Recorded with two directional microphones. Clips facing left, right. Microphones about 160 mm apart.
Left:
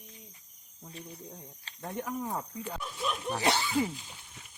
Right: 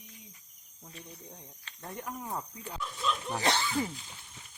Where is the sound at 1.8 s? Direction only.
Centre (ahead or behind).